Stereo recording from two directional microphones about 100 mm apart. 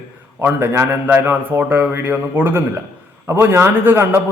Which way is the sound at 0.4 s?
20° right (ahead or behind).